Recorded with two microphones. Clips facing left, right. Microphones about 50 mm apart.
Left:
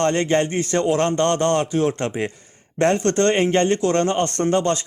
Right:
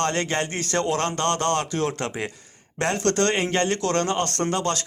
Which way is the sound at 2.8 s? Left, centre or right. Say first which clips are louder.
Left 5 dB; left.